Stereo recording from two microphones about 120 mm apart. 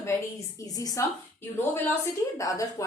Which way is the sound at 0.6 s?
30° left (ahead or behind).